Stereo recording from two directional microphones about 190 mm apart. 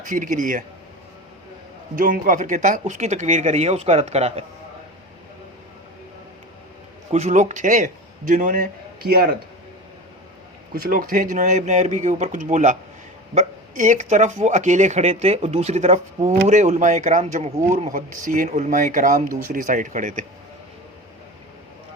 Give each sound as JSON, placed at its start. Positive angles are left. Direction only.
{"t": 0.1, "sound": "speech", "side_deg": -45}
{"t": 2.0, "sound": "speech", "side_deg": -50}
{"t": 7.1, "sound": "a man's voice", "side_deg": -40}
{"t": 10.8, "sound": "speech", "side_deg": -45}